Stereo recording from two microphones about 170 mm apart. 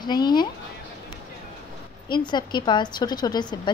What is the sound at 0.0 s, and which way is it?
Speech, 25° left (ahead or behind).